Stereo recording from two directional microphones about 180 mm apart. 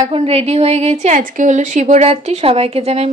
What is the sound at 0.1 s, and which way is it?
A woman's voice, 35° right (ahead or behind).